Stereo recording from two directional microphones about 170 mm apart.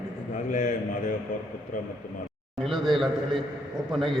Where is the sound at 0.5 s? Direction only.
50° left (ahead or behind).